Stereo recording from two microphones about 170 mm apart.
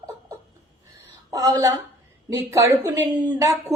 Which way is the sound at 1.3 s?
20° right (ahead or behind).